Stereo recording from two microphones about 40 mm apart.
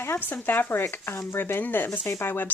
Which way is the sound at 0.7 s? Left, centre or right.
Left.